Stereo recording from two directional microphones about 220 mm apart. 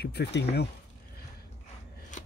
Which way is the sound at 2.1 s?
35° left (ahead or behind).